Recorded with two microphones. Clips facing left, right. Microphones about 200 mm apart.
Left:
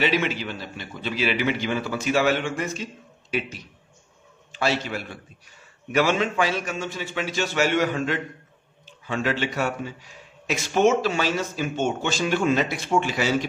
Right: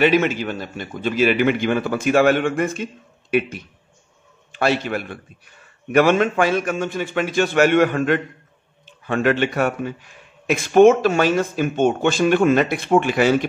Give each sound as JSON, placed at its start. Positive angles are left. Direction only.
{"t": 0.0, "sound": "a man's voice", "side_deg": -50}